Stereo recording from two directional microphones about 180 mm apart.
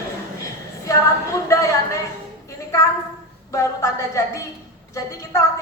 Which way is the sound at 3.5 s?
15° left (ahead or behind).